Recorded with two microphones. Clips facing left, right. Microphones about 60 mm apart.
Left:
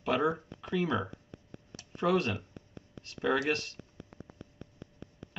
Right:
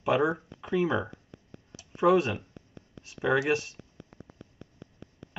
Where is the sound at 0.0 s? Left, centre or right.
Centre.